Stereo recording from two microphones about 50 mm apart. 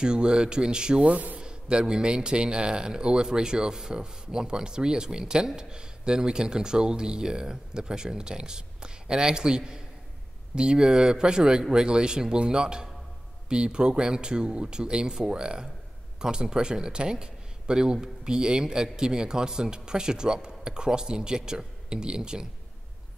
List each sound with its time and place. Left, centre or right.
0.0 s speech: centre
1.4 s a man's voice: centre